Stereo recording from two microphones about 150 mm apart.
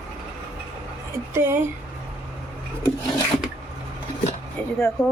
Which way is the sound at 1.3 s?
15° right (ahead or behind).